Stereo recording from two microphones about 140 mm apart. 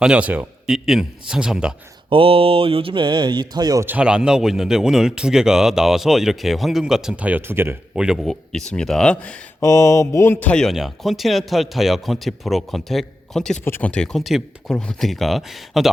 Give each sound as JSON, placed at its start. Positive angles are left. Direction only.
{"t": 0.0, "sound": "speech", "side_deg": -10}
{"t": 2.0, "sound": "speech", "side_deg": -40}
{"t": 3.8, "sound": "speech", "side_deg": -10}
{"t": 7.9, "sound": "speech", "side_deg": -5}
{"t": 9.6, "sound": "a sound", "side_deg": 20}
{"t": 10.5, "sound": "speech", "side_deg": 0}